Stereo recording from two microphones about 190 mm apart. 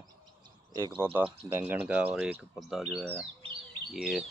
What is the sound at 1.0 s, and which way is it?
Speech, 10° right (ahead or behind).